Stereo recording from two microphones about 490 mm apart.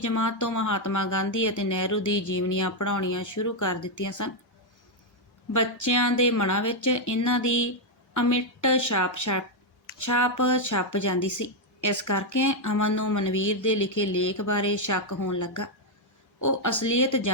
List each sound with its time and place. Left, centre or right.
0.0 s speech: left
5.5 s speech: left